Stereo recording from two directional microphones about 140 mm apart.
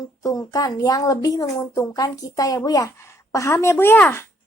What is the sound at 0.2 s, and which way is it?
Speech, 25° left (ahead or behind).